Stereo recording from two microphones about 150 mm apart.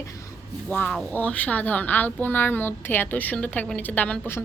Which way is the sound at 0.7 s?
10° left (ahead or behind).